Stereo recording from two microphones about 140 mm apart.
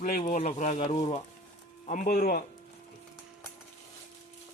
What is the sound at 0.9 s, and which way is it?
Speech, 45° left (ahead or behind).